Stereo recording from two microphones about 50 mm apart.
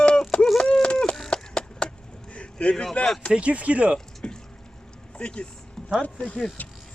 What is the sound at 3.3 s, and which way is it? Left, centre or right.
Speech, right.